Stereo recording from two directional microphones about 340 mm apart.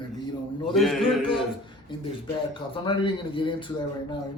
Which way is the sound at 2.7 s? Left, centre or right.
Centre.